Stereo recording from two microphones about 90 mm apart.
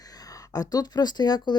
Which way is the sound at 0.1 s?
45° left (ahead or behind).